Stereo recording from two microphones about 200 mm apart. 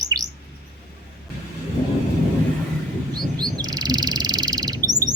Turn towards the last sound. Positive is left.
turn(degrees=-20)  # may be behind; listen again after turning